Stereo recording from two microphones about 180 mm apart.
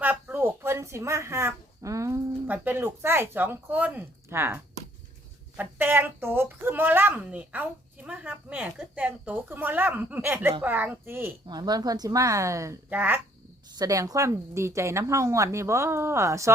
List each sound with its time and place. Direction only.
0.0 s speech: 10° right (ahead or behind)
11.4 s speech: 25° right (ahead or behind)